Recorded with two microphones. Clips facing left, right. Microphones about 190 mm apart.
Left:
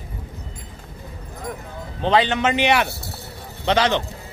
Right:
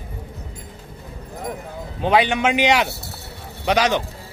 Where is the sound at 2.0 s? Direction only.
10° right (ahead or behind).